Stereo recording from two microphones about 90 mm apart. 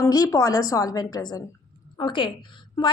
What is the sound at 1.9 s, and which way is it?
Speech, 60° left (ahead or behind).